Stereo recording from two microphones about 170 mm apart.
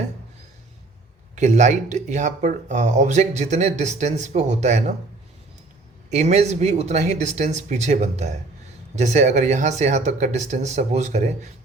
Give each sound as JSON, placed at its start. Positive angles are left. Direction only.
{"t": 1.4, "sound": "speech", "side_deg": -45}
{"t": 6.1, "sound": "speech", "side_deg": -40}